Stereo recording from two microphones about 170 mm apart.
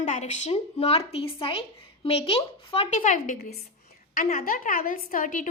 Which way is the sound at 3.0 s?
50° left (ahead or behind).